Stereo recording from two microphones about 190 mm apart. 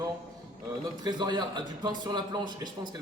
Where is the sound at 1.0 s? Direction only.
20° right (ahead or behind).